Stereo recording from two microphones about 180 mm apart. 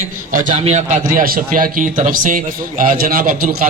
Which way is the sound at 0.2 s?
45° right (ahead or behind).